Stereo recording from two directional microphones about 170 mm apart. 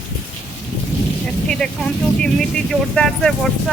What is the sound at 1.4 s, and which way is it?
Speech, 5° left (ahead or behind).